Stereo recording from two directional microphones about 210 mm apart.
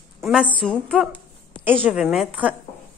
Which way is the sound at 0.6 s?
Centre (ahead or behind).